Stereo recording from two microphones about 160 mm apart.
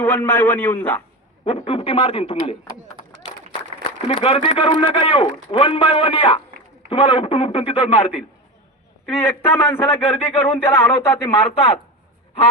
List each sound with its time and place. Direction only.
0.0 s speech: 10° left (ahead or behind)
1.5 s a man's voice: 35° left (ahead or behind)
4.1 s a man's voice: 35° left (ahead or behind)
9.0 s speech: 15° left (ahead or behind)
11.4 s a man's voice: 40° left (ahead or behind)